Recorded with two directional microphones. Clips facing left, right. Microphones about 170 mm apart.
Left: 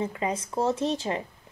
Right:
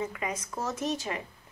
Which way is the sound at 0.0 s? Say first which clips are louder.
Left 5 dB; 30° left (ahead or behind).